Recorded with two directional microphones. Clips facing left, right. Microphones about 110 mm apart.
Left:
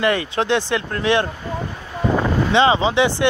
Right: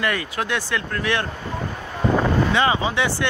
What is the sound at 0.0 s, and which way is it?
Speech, 25° left (ahead or behind).